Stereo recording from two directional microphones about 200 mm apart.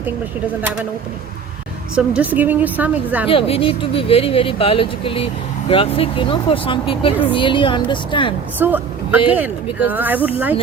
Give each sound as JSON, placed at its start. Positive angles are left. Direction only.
{"t": 2.0, "sound": "a woman's voice", "side_deg": -5}
{"t": 3.2, "sound": "speech", "side_deg": 30}
{"t": 8.5, "sound": "a woman's voice", "side_deg": -10}